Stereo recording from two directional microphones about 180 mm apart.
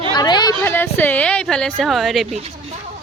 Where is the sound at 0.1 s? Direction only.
25° left (ahead or behind).